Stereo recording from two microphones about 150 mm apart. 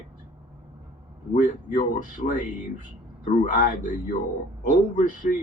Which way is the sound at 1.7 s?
55° left (ahead or behind).